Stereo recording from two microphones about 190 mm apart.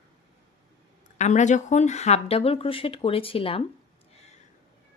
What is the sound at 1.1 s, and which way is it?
A woman's voice, 40° left (ahead or behind).